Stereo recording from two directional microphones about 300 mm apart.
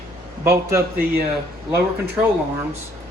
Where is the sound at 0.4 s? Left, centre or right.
Centre.